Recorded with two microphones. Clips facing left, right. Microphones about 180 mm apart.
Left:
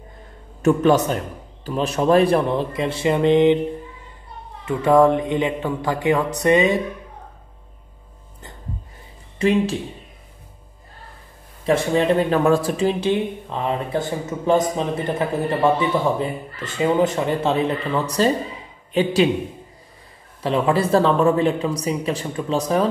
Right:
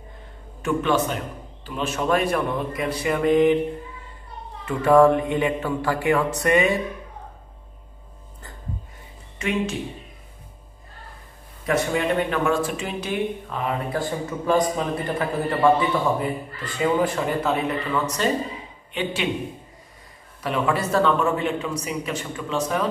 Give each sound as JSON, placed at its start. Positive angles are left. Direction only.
{"t": 0.6, "sound": "speech", "side_deg": 40}
{"t": 4.6, "sound": "speech", "side_deg": 20}
{"t": 9.4, "sound": "speech", "side_deg": 30}
{"t": 11.6, "sound": "speech", "side_deg": 30}
{"t": 20.4, "sound": "speech", "side_deg": 30}